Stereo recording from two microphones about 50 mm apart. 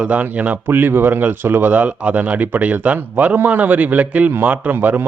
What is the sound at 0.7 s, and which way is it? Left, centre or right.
Speech, right.